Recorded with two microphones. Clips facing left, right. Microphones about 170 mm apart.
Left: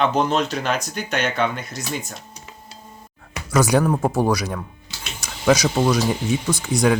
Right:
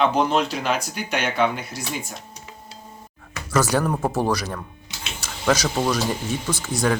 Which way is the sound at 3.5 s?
15° left (ahead or behind).